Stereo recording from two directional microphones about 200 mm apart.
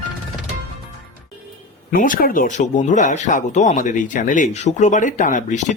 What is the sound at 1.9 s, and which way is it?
Speech, 45° left (ahead or behind).